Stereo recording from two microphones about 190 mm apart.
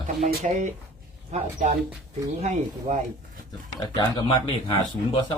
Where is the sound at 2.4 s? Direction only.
40° right (ahead or behind).